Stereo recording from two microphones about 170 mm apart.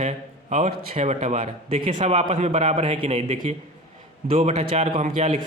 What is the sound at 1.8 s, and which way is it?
A man's voice, 30° right (ahead or behind).